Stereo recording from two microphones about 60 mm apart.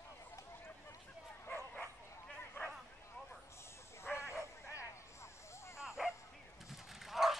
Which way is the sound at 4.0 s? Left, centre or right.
Left.